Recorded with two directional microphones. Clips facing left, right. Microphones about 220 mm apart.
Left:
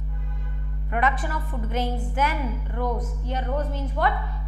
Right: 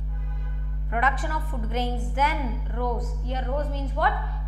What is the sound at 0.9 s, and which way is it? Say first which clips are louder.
Speech: left 2 dB; 15° left (ahead or behind).